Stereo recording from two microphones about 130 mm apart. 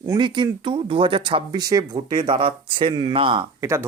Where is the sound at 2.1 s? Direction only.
40° right (ahead or behind).